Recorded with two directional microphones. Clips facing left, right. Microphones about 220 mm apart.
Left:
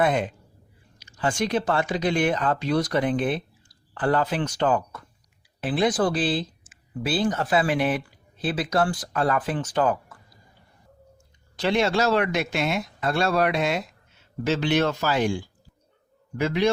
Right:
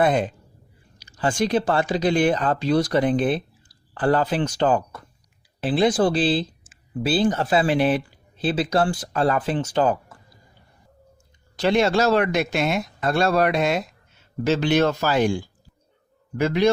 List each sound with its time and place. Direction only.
0.0 s speech: 35° right (ahead or behind)
11.6 s speech: 40° right (ahead or behind)